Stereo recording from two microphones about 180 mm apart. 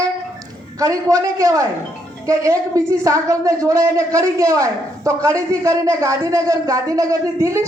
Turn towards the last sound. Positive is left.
turn(degrees=-15)  # may be behind; listen again after turning